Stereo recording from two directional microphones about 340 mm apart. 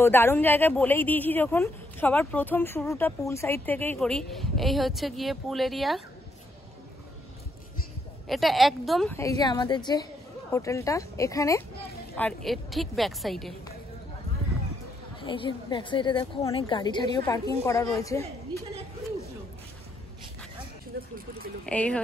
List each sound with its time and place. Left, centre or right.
0.0 s a woman's voice: centre
8.3 s a woman's voice: centre
15.1 s a woman's voice: centre
20.9 s a sound: right
21.6 s a woman's voice: centre